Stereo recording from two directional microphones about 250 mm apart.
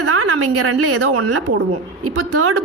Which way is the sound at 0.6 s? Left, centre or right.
Right.